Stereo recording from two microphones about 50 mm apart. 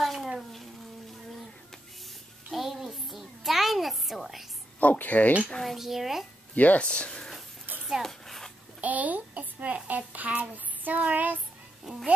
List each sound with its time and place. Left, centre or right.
0.0 s a sound: centre
0.4 s frying: centre
2.5 s a sound: centre
4.7 s speech: left
5.6 s speech: centre
6.5 s speech: left
6.9 s speech: left
7.8 s a sound: centre
8.8 s a child's voice: right
9.8 s child singing: right
11.9 s speech: centre